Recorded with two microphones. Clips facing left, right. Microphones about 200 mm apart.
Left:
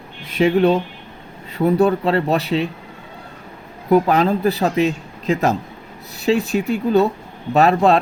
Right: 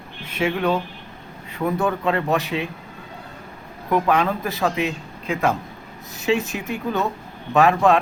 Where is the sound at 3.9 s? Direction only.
35° left (ahead or behind).